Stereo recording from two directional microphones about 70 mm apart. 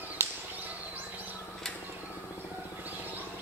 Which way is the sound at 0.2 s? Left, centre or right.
Right.